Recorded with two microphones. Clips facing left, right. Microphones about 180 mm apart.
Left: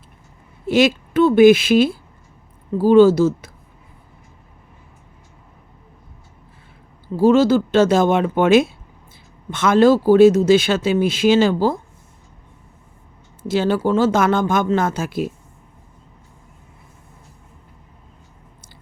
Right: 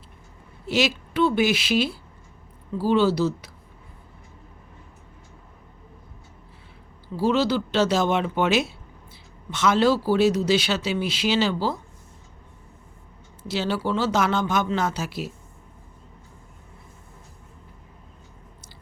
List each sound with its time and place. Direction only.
0.7 s speech: 50° left (ahead or behind)
7.2 s speech: 45° left (ahead or behind)
13.5 s speech: 50° left (ahead or behind)